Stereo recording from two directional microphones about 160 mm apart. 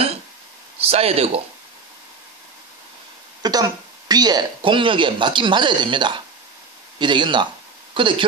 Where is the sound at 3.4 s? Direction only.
25° right (ahead or behind).